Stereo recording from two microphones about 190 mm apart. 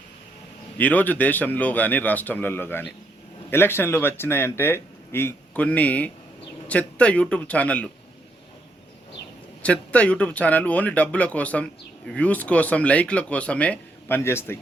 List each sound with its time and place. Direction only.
0.8 s speech: 10° left (ahead or behind)
9.6 s speech: 5° left (ahead or behind)